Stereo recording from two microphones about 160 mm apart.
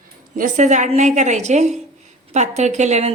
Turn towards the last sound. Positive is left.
turn(degrees=-45)  # may be behind; listen again after turning